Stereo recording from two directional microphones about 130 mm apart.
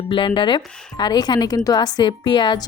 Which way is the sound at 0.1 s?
40° left (ahead or behind).